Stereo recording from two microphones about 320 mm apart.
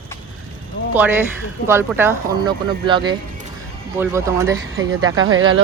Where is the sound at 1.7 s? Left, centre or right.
Centre.